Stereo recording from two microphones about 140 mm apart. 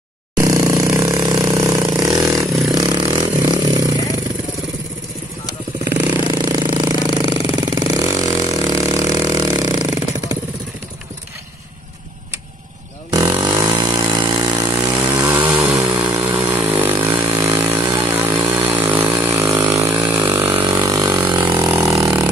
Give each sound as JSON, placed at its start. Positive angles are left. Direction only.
{"t": 0.4, "sound": "chainsaw", "side_deg": -25}
{"t": 1.6, "sound": "vehicle", "side_deg": -30}
{"t": 5.9, "sound": "jackhammer", "side_deg": -30}
{"t": 13.1, "sound": "motorcycle", "side_deg": -30}
{"t": 13.7, "sound": "vehicle", "side_deg": -30}
{"t": 15.3, "sound": "chainsaw", "side_deg": -15}
{"t": 15.8, "sound": "a sound", "side_deg": -35}
{"t": 16.3, "sound": "chainsaw", "side_deg": -15}
{"t": 17.1, "sound": "a sound", "side_deg": -40}
{"t": 18.0, "sound": "chainsaw", "side_deg": -15}
{"t": 18.8, "sound": "chainsaw", "side_deg": -40}
{"t": 19.5, "sound": "a sound", "side_deg": -30}
{"t": 20.6, "sound": "vehicle", "side_deg": -30}